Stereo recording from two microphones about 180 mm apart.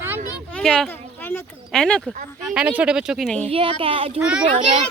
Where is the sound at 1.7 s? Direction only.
5° left (ahead or behind).